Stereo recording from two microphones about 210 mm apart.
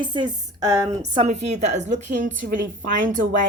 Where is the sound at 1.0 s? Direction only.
30° right (ahead or behind).